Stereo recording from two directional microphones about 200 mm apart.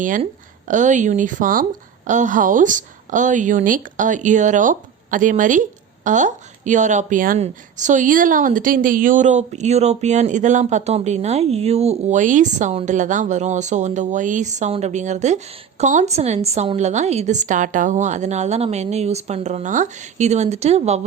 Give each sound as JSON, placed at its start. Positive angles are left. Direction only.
{"t": 0.0, "sound": "speech", "side_deg": -40}